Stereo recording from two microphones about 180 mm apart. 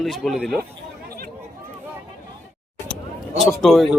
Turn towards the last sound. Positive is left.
turn(degrees=0)  # may be behind; listen again after turning